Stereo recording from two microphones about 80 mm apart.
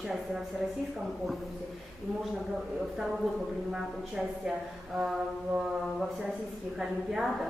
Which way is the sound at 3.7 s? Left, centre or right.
Centre.